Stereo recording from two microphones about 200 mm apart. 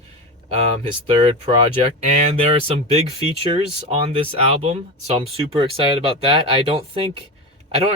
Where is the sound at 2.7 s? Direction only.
30° right (ahead or behind).